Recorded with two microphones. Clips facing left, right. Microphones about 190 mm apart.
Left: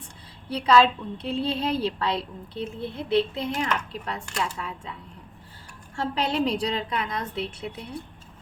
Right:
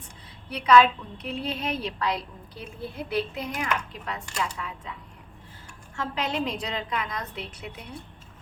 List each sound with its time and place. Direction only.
0.5 s a woman's voice: 30° left (ahead or behind)
6.0 s a woman's voice: 30° left (ahead or behind)